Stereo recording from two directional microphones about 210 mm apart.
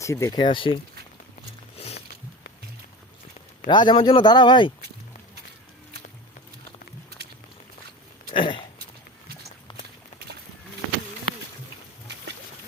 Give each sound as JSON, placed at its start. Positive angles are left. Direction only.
{"t": 0.0, "sound": "speech", "side_deg": 15}
{"t": 1.7, "sound": "music", "side_deg": 30}
{"t": 3.7, "sound": "speech", "side_deg": 20}
{"t": 8.3, "sound": "a sound", "side_deg": 25}